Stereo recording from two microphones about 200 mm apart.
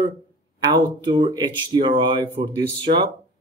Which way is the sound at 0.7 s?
20° right (ahead or behind).